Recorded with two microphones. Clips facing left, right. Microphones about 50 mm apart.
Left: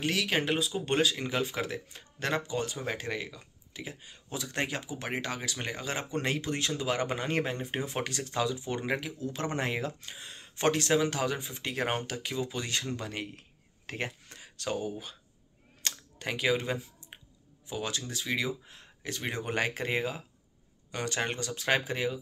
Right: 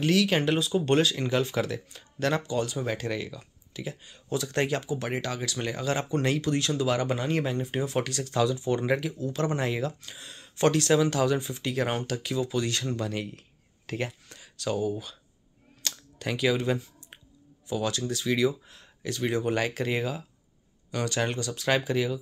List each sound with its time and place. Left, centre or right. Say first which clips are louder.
0.0 s speech: right 6 dB; centre
15.8 s clicking: right 2 dB; left
17.6 s speech: right 6 dB; left